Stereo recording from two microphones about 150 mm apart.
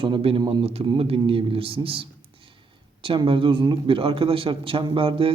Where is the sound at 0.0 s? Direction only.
40° right (ahead or behind).